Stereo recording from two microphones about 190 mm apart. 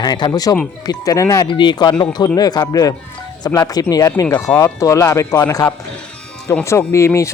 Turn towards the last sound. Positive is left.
turn(degrees=15)  # may be behind; listen again after turning